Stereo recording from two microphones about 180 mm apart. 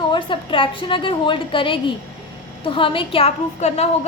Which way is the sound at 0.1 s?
30° left (ahead or behind).